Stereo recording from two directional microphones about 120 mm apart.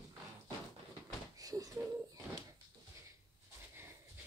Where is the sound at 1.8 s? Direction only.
30° right (ahead or behind).